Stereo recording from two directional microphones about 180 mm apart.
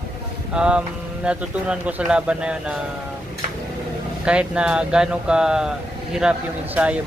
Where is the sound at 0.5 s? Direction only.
5° right (ahead or behind).